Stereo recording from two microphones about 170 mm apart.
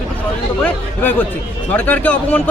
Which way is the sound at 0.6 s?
10° left (ahead or behind).